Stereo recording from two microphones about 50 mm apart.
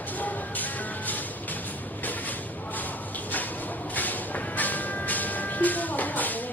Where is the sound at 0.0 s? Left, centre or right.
Left.